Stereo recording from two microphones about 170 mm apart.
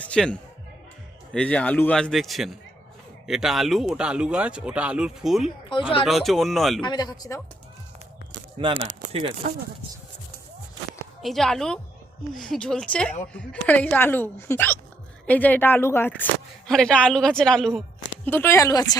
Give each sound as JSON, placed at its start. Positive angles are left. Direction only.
{"t": 0.1, "sound": "speech", "side_deg": 5}
{"t": 6.8, "sound": "speech", "side_deg": 25}
{"t": 8.5, "sound": "speech", "side_deg": -30}
{"t": 8.8, "sound": "speech", "side_deg": -45}
{"t": 11.2, "sound": "speech", "side_deg": 0}
{"t": 18.3, "sound": "speech", "side_deg": 15}